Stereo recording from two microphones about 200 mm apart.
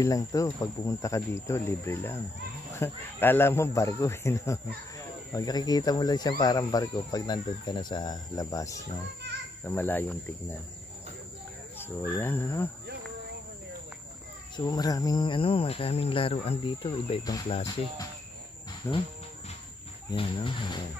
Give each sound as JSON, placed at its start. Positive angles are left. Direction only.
{"t": 0.0, "sound": "speech", "side_deg": 15}
{"t": 11.8, "sound": "speech", "side_deg": 10}
{"t": 14.7, "sound": "speech", "side_deg": 20}
{"t": 20.1, "sound": "speech", "side_deg": 25}